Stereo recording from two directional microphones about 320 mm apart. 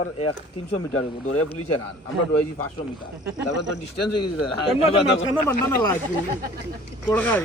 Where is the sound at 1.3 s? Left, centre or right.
Left.